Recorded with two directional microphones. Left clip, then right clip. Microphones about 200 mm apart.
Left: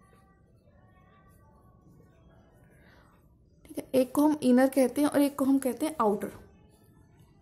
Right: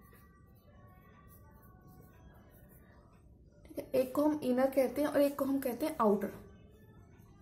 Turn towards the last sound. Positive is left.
turn(degrees=35)  # may be behind; listen again after turning